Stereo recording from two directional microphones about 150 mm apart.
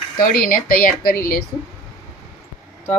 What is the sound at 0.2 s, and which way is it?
Speech, 75° left (ahead or behind).